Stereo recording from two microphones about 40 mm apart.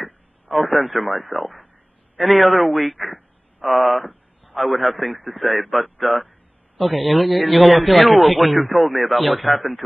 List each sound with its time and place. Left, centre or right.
0.7 s a man's voice: centre
5.1 s a man's voice: centre
5.4 s a man's voice: centre